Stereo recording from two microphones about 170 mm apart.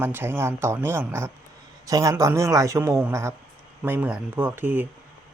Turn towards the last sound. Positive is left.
turn(degrees=-10)  # may be behind; listen again after turning